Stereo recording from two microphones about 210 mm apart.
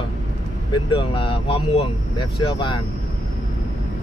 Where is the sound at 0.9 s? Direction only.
25° left (ahead or behind).